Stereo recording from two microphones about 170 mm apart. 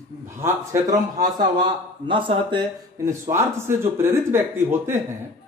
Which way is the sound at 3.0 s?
15° right (ahead or behind).